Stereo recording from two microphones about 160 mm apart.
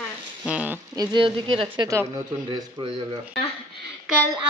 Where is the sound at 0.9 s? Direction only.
30° right (ahead or behind).